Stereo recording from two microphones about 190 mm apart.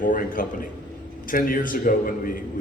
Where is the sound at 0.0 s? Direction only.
45° left (ahead or behind).